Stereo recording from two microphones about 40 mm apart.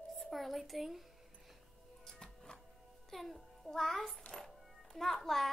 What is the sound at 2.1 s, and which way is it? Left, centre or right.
Music, centre.